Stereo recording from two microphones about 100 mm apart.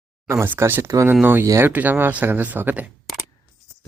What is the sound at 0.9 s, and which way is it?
Speech, 35° right (ahead or behind).